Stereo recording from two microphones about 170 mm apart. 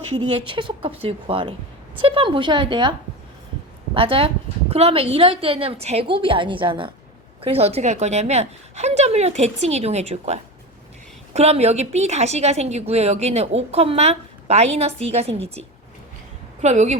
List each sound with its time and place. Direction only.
0.2 s a woman's voice: 30° right (ahead or behind)
3.9 s a woman's voice: 30° right (ahead or behind)